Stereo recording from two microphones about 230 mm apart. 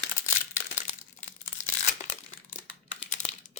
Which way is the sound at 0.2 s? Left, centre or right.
Left.